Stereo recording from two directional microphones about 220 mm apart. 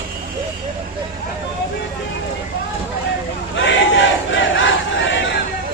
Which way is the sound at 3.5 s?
55° left (ahead or behind).